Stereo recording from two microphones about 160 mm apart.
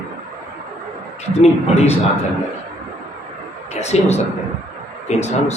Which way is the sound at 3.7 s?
45° left (ahead or behind).